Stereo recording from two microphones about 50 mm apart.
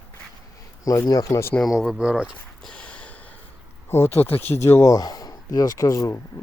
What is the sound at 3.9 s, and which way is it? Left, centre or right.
Speech, left.